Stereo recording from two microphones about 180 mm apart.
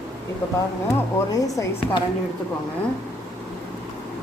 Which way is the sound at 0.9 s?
15° left (ahead or behind).